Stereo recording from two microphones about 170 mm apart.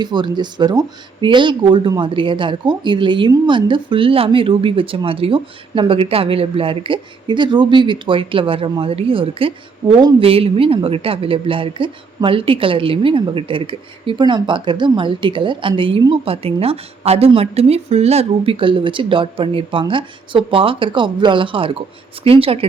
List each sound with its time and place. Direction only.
0.0 s a woman's voice: 25° right (ahead or behind)